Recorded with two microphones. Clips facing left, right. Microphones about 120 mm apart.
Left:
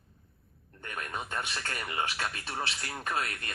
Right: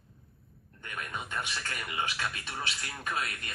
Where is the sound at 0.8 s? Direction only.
40° left (ahead or behind).